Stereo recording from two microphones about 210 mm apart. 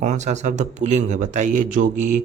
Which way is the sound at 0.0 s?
35° right (ahead or behind).